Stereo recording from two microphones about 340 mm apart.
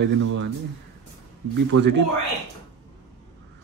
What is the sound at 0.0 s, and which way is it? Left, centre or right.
Speech, right.